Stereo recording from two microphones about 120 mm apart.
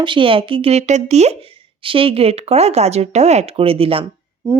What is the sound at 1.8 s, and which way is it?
Speech, 50° right (ahead or behind).